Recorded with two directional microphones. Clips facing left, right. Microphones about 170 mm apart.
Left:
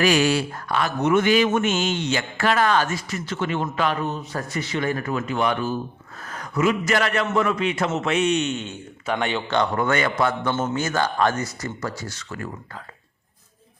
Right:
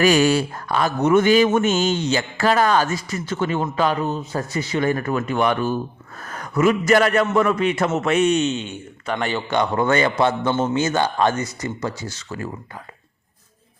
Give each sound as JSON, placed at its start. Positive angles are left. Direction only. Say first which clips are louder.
{"t": 0.0, "sound": "a man's voice", "louder": "right 3 dB", "side_deg": -45}
{"t": 4.6, "sound": "a man's voice", "louder": "right 4 dB", "side_deg": -40}
{"t": 8.4, "sound": "speech", "louder": "right 4 dB", "side_deg": -25}
{"t": 9.0, "sound": "speech", "louder": "right 1 dB", "side_deg": 0}
{"t": 9.7, "sound": "speech", "louder": "right 3 dB", "side_deg": -30}